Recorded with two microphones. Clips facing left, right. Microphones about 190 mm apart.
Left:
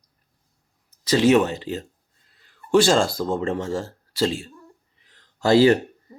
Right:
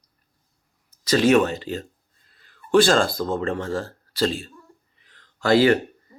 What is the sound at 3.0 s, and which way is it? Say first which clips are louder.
Speech: even; 10° left (ahead or behind).